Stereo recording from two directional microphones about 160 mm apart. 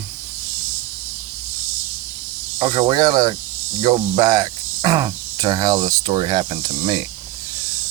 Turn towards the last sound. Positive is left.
turn(degrees=-30)  # may be behind; listen again after turning